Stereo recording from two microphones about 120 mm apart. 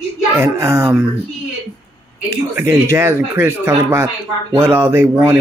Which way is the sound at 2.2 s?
25° right (ahead or behind).